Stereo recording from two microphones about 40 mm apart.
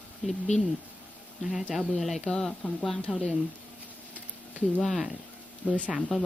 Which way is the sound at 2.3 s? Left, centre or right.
Centre.